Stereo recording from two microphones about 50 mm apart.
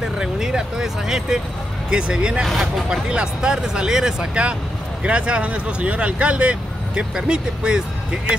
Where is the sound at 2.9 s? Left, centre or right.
Centre.